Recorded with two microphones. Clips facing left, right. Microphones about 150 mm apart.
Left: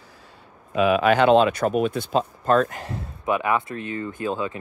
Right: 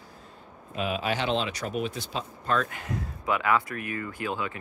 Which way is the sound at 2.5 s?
40° left (ahead or behind).